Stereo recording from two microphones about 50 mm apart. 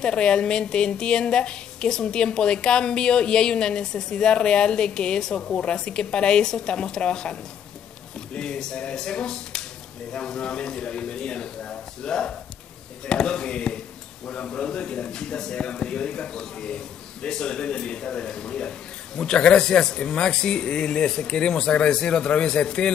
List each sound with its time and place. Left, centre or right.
0.0 s a man's voice: centre
8.4 s a man's voice: centre